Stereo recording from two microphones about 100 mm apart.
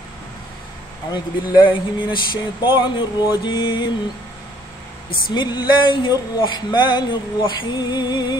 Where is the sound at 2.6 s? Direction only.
55° left (ahead or behind).